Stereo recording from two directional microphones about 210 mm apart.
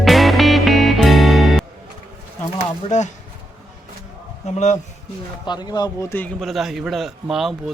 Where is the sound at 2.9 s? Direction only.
35° left (ahead or behind).